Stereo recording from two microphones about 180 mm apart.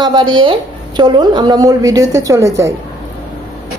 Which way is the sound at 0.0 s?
25° right (ahead or behind).